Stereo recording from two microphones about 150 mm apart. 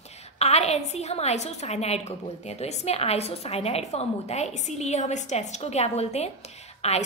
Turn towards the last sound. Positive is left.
turn(degrees=45)  # may be behind; listen again after turning